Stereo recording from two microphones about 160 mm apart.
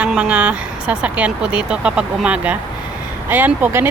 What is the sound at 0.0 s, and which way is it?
Speech, 5° right (ahead or behind).